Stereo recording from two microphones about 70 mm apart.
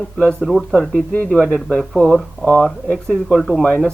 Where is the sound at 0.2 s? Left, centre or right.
Centre.